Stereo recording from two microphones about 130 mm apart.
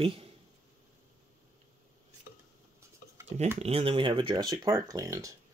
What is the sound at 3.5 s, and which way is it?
Speech, 50° right (ahead or behind).